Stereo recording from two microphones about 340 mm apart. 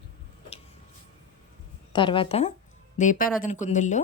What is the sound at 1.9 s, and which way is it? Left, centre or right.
A woman's voice, centre.